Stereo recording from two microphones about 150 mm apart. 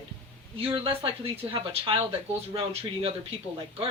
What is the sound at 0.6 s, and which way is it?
Speech, 35° right (ahead or behind).